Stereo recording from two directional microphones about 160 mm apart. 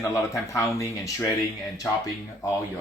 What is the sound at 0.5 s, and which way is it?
Speech, 20° left (ahead or behind).